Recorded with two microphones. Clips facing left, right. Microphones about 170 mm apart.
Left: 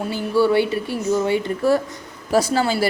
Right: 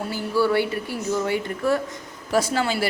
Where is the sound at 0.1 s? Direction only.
20° left (ahead or behind).